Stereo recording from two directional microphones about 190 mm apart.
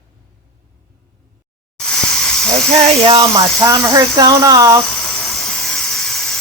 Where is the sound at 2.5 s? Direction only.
35° right (ahead or behind).